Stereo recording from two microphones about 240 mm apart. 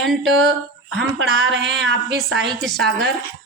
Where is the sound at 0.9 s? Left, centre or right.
Right.